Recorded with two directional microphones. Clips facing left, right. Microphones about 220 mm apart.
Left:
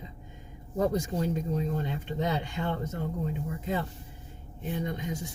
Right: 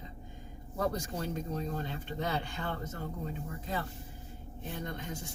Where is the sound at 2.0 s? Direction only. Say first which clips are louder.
Left 4 dB; 20° left (ahead or behind).